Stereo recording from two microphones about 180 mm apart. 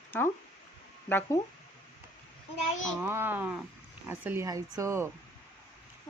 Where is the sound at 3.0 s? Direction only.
15° right (ahead or behind).